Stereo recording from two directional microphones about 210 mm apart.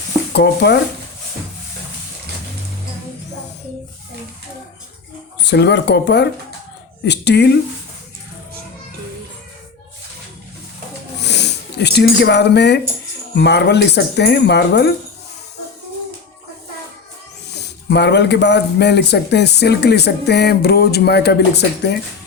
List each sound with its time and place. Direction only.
0.3 s speech: 55° left (ahead or behind)
5.5 s speech: 55° left (ahead or behind)
11.2 s speech: 55° left (ahead or behind)
17.5 s speech: 55° left (ahead or behind)